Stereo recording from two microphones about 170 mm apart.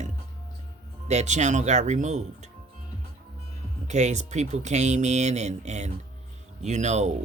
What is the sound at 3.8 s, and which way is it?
Speech, 40° right (ahead or behind).